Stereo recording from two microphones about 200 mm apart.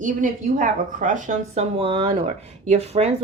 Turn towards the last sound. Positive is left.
turn(degrees=-30)  # may be behind; listen again after turning